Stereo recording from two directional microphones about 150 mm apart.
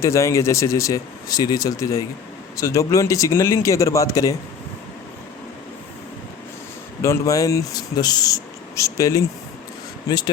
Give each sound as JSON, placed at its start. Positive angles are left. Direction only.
{"t": 0.0, "sound": "speech", "side_deg": 20}
{"t": 7.0, "sound": "speech", "side_deg": 20}